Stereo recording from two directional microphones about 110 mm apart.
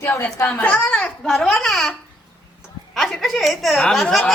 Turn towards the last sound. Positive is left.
turn(degrees=5)  # may be behind; listen again after turning